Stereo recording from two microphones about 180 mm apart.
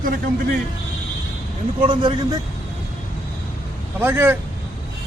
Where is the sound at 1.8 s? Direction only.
25° right (ahead or behind).